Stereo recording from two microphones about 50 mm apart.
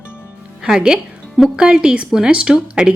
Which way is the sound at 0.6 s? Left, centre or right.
Centre.